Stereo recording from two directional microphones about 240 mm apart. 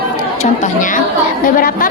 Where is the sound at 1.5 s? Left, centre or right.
Left.